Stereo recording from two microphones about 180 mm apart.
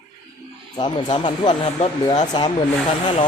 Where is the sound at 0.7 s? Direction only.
25° left (ahead or behind).